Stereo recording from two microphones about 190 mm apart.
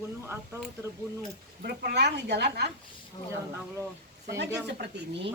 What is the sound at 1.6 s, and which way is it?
Speech, 55° right (ahead or behind).